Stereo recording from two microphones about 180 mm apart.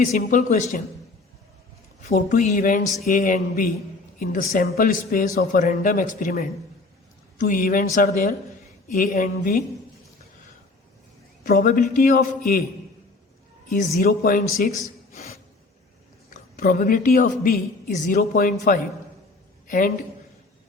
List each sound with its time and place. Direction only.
0.0 s speech: 50° left (ahead or behind)
2.0 s speech: 45° left (ahead or behind)
11.4 s speech: 50° left (ahead or behind)
14.0 s speech: 50° left (ahead or behind)
16.3 s speech: 50° left (ahead or behind)
19.6 s a man's voice: 45° left (ahead or behind)